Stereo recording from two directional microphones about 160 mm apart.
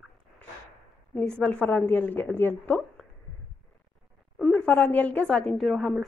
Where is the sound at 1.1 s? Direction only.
5° left (ahead or behind).